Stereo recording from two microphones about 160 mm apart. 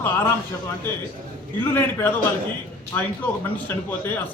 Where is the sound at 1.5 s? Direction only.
15° left (ahead or behind).